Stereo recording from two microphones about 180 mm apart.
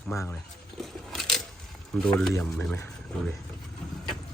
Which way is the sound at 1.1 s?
Centre (ahead or behind).